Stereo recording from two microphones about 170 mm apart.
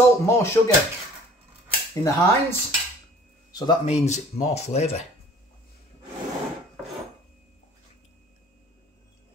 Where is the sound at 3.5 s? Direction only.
30° left (ahead or behind).